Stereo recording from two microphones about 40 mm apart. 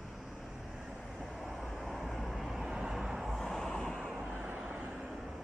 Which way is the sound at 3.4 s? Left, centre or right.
Centre.